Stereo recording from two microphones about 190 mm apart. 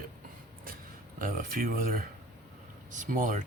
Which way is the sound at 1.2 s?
45° right (ahead or behind).